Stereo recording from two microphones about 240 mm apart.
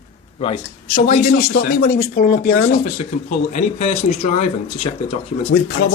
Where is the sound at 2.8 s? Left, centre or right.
Left.